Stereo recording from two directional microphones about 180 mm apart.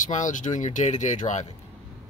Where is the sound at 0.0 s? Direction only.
45° left (ahead or behind).